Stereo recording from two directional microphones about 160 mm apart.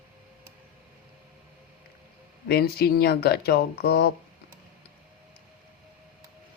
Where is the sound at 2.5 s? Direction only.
75° left (ahead or behind).